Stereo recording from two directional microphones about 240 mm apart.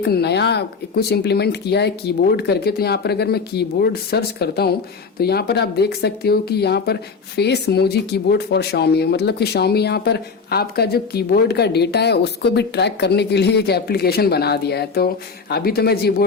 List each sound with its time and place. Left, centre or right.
0.0 s speech: left